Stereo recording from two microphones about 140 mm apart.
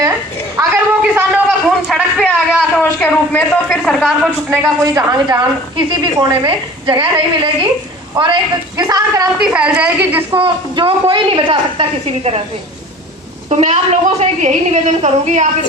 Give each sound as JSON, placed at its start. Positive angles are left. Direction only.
{"t": 0.5, "sound": "a sound", "side_deg": -15}
{"t": 1.6, "sound": "a sound", "side_deg": 0}
{"t": 2.8, "sound": "speech", "side_deg": 10}
{"t": 4.4, "sound": "a woman's voice", "side_deg": -10}
{"t": 4.8, "sound": "a woman's voice", "side_deg": -25}
{"t": 9.4, "sound": "a woman's voice", "side_deg": -10}
{"t": 10.4, "sound": "a woman's voice", "side_deg": -35}
{"t": 13.5, "sound": "a woman's voice", "side_deg": -55}